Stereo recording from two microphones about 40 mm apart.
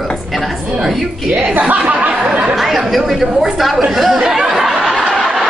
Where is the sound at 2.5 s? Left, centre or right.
Centre.